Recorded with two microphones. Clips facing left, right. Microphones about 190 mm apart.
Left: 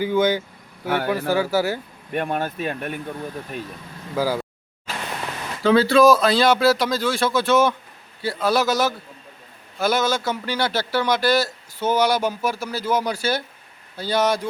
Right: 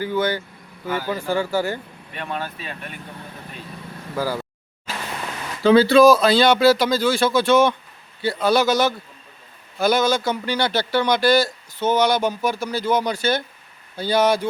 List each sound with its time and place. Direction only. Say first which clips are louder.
0.0 s speech: left 3 dB; 15° left (ahead or behind)
0.9 s speech: left 3 dB; 65° left (ahead or behind)
1.3 s speech: even; 5° left (ahead or behind)
2.1 s speech: left 6 dB; 50° left (ahead or behind)
4.1 s speech: left 2 dB; 10° left (ahead or behind)
5.6 s a man's voice: right 2 dB; centre (ahead or behind)